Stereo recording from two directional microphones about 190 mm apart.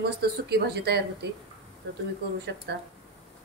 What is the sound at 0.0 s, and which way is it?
Speech, 60° right (ahead or behind).